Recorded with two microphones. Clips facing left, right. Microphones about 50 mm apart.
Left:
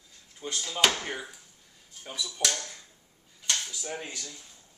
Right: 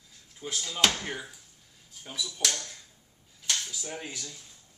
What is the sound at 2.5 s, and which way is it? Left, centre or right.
Speech, centre.